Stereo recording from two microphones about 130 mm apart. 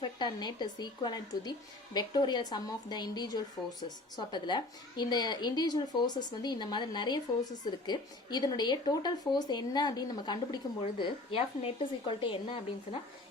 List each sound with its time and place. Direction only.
0.0 s a woman's voice: 35° left (ahead or behind)
11.0 s speech: 45° left (ahead or behind)